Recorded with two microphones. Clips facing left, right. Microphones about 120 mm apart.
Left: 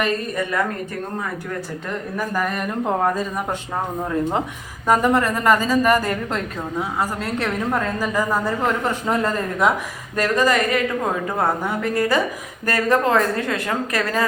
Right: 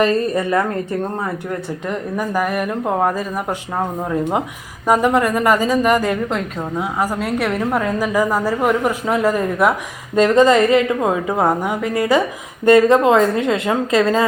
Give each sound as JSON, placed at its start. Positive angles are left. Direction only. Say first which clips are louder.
{"t": 0.0, "sound": "a woman's voice", "louder": "right 6 dB", "side_deg": -30}
{"t": 1.9, "sound": "a woman's voice", "louder": "right 4 dB", "side_deg": -15}
{"t": 4.9, "sound": "a woman's voice", "louder": "right 2 dB", "side_deg": -10}
{"t": 10.2, "sound": "a woman's voice", "louder": "right 7 dB", "side_deg": -25}